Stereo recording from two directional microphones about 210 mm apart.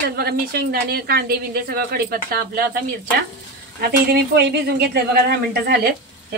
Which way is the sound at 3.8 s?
50° right (ahead or behind).